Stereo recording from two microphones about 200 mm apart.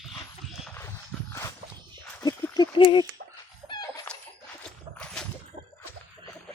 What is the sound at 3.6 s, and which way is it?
Chicken, 25° left (ahead or behind).